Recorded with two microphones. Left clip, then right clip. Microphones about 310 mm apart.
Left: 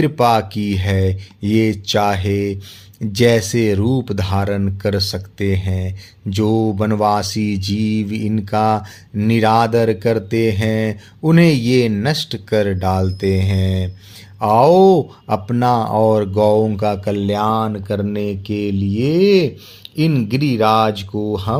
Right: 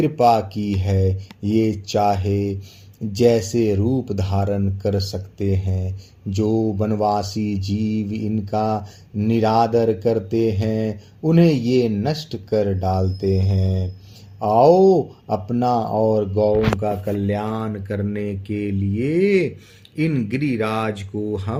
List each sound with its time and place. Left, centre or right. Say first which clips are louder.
0.2 s speech: left 1 dB; left
6.9 s mantra: left 4 dB; left
7.2 s speech: left 4 dB; left
8.4 s mantra: left 6 dB; left
9.1 s speech: left 4 dB; left
16.3 s mantra: left 4 dB; left
16.8 s speech: left 4 dB; left; by 21.5 s centre